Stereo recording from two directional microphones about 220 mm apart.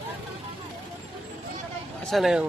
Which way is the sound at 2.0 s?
Centre (ahead or behind).